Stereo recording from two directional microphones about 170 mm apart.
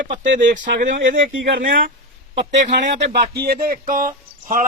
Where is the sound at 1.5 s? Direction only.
90° right.